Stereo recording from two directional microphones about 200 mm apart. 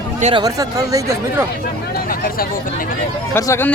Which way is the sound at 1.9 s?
45° left (ahead or behind).